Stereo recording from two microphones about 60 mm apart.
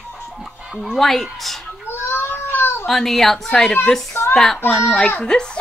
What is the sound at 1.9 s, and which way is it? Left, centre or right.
Baby cry, left.